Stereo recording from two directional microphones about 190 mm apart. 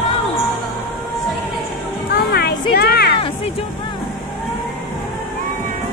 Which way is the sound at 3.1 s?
30° left (ahead or behind).